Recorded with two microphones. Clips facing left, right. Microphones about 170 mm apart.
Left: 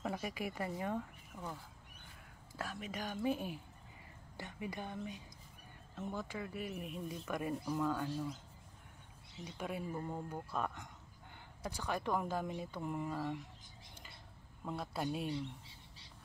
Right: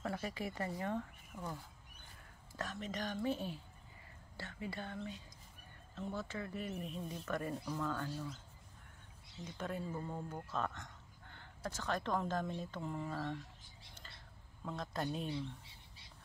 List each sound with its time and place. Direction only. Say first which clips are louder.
0.0 s speech: left 1 dB; 15° left (ahead or behind)
9.4 s speech: even; 10° left (ahead or behind)
14.6 s speech: left 1 dB; 10° left (ahead or behind)